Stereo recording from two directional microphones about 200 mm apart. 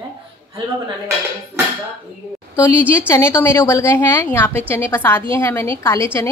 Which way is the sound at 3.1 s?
10° left (ahead or behind).